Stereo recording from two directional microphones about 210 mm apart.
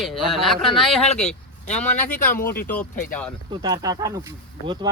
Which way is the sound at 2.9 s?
40° left (ahead or behind).